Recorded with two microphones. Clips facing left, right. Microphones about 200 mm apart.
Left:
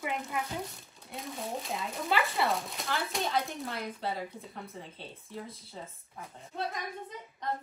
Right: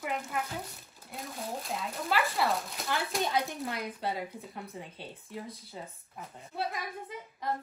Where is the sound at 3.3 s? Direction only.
15° right (ahead or behind).